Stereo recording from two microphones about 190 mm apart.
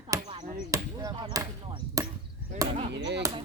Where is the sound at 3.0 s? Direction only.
65° right (ahead or behind).